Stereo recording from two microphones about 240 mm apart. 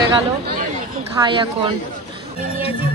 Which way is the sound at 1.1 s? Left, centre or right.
Centre.